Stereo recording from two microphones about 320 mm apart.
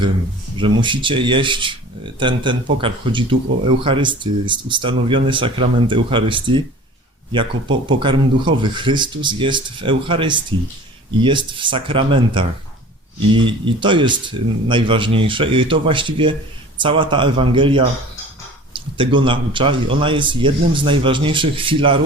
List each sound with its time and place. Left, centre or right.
0.5 s speech: centre